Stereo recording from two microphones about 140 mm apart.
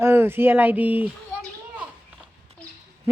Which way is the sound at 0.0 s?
15° right (ahead or behind).